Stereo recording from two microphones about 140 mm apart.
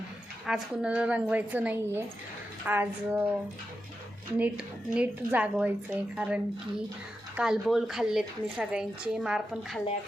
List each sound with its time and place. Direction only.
0.4 s a woman's voice: 5° right (ahead or behind)
4.4 s a woman's voice: 10° right (ahead or behind)